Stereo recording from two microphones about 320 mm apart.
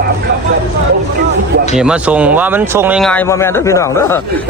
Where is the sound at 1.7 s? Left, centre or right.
Centre.